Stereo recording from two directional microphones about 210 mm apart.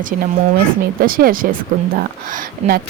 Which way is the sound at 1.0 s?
40° right (ahead or behind).